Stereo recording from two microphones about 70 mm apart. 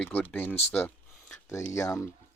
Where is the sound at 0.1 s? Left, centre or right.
Left.